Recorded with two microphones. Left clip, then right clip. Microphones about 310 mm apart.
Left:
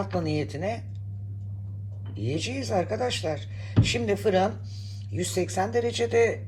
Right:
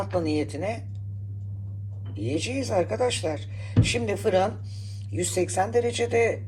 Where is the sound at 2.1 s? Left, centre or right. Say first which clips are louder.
Right 2 dB; centre.